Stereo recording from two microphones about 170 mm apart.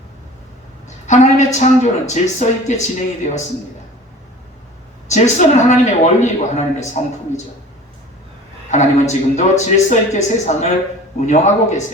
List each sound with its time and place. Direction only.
0.9 s a sound: 45° left (ahead or behind)
1.5 s a man's voice: 45° left (ahead or behind)
5.0 s a man's voice: 45° left (ahead or behind)
8.7 s a man's voice: 45° left (ahead or behind)